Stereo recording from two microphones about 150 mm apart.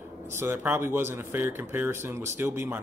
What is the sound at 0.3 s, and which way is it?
Speech, 15° right (ahead or behind).